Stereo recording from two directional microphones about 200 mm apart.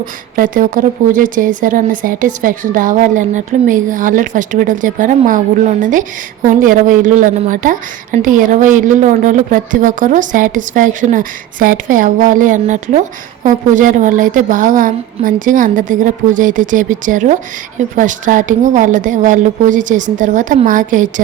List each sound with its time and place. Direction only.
0.0 s a woman's voice: 40° right (ahead or behind)